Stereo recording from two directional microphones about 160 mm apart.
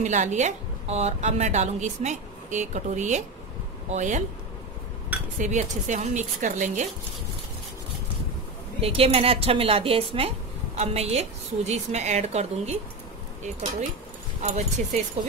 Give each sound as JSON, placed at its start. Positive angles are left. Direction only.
{"t": 0.0, "sound": "a woman's voice", "side_deg": -45}
{"t": 5.4, "sound": "a woman's voice", "side_deg": -50}
{"t": 8.8, "sound": "a woman's voice", "side_deg": -35}